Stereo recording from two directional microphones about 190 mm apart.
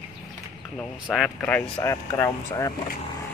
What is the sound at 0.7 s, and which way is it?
Speech, 5° left (ahead or behind).